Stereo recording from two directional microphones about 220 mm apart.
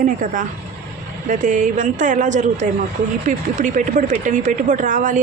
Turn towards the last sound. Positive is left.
turn(degrees=-35)  # may be behind; listen again after turning